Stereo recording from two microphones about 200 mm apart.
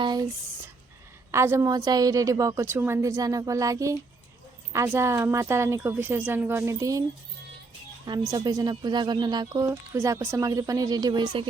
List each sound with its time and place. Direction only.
0.0 s speech: 20° right (ahead or behind)
1.3 s speech: 15° right (ahead or behind)
8.3 s speech: 20° right (ahead or behind)